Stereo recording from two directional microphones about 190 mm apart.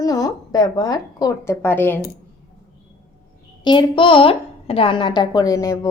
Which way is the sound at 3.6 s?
25° left (ahead or behind).